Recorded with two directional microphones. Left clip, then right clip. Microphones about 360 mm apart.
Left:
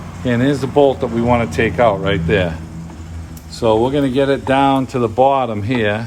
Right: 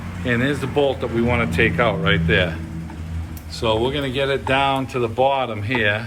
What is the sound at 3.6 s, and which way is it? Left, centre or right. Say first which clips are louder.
Speech: left 6 dB; left.